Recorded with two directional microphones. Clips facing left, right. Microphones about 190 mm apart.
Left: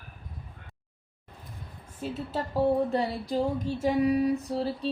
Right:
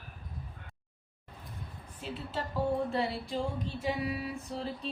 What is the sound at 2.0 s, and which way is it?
Speech, 45° left (ahead or behind).